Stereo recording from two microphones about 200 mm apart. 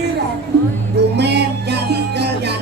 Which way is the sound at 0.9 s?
55° right (ahead or behind).